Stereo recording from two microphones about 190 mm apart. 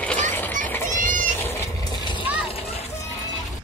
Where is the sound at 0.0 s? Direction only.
10° left (ahead or behind).